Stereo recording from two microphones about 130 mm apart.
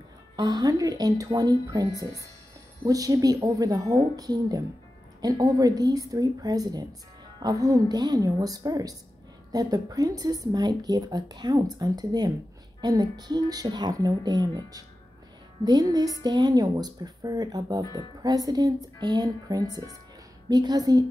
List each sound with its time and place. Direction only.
0.4 s speech: 30° right (ahead or behind)